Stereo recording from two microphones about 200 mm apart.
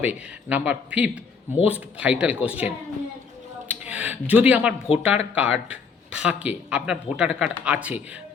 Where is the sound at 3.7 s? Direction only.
5° right (ahead or behind).